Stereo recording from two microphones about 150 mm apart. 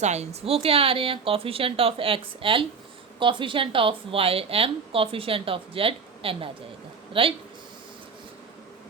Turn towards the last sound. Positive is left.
turn(degrees=-35)  # may be behind; listen again after turning